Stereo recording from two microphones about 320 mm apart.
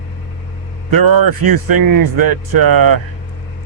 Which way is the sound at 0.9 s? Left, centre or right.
Right.